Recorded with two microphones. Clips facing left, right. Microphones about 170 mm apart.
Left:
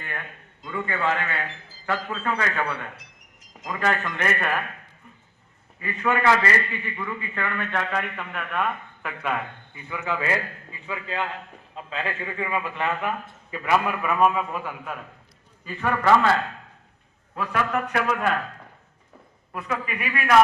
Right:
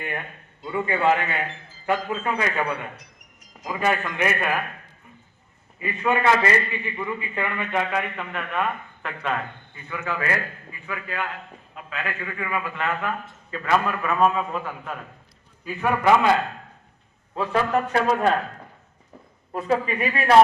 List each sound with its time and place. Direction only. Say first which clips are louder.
0.6 s a man's voice: right 4 dB; 15° right (ahead or behind)
5.8 s a man's voice: right 1 dB; 20° right (ahead or behind); by 14.9 s 10° left (ahead or behind)
15.6 s a man's voice: right 2 dB; 5° right (ahead or behind)
17.3 s a man's voice: right 3 dB; 30° right (ahead or behind)
19.5 s a man's voice: right 7 dB; 30° right (ahead or behind)